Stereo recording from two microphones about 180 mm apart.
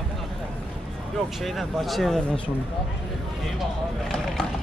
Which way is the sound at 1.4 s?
Centre (ahead or behind).